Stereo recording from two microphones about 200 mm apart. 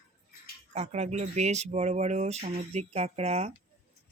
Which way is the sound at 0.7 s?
35° right (ahead or behind).